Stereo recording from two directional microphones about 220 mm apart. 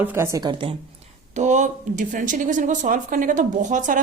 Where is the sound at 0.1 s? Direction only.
10° right (ahead or behind).